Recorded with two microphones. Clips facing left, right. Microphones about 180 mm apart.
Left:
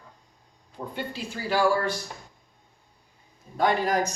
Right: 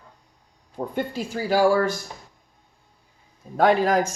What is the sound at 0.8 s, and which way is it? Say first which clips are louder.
Speech: right 6 dB; 45° right (ahead or behind).